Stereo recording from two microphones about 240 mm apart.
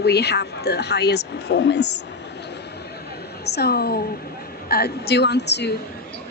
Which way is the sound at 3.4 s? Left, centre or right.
Left.